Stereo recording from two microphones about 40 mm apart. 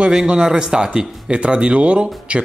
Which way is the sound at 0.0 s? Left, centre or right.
Right.